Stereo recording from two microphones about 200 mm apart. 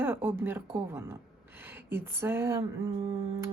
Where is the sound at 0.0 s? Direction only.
10° right (ahead or behind).